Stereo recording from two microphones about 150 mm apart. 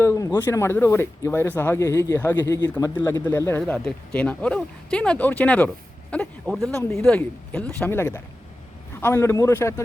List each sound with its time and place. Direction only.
0.0 s speech: 15° left (ahead or behind)
2.6 s a man's voice: 25° left (ahead or behind)
2.9 s a man's voice: 15° left (ahead or behind)